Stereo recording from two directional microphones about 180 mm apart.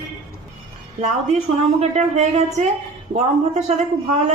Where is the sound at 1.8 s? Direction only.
40° right (ahead or behind).